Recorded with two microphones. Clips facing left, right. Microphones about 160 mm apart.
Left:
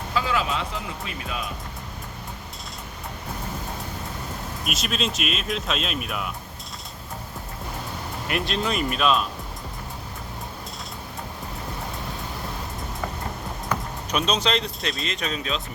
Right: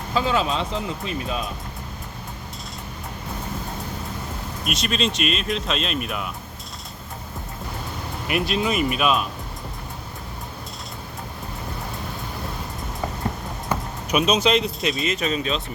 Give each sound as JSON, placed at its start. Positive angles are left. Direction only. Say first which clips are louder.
{"t": 0.1, "sound": "speech", "louder": "right 3 dB", "side_deg": -25}
{"t": 4.6, "sound": "speech", "louder": "right 4 dB", "side_deg": 0}
{"t": 8.3, "sound": "speech", "louder": "right 3 dB", "side_deg": -5}
{"t": 14.1, "sound": "speech", "louder": "right 5 dB", "side_deg": -10}